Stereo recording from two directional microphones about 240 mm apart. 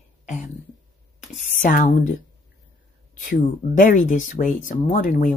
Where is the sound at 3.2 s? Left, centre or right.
Left.